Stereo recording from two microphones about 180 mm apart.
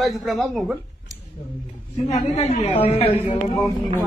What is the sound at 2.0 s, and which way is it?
A woman's voice, 40° left (ahead or behind).